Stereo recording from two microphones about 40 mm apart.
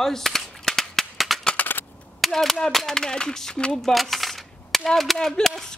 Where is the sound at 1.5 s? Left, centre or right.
Left.